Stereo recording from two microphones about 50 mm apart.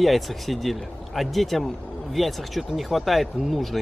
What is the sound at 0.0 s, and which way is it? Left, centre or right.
A man's voice, centre.